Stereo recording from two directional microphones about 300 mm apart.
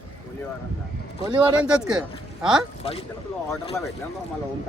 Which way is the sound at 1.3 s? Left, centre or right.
Centre.